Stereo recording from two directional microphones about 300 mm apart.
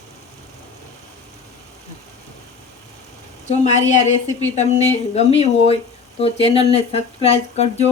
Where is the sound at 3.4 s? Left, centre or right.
Left.